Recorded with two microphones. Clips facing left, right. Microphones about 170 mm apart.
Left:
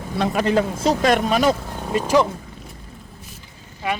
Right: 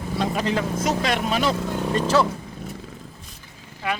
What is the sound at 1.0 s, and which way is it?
Speech, 45° left (ahead or behind).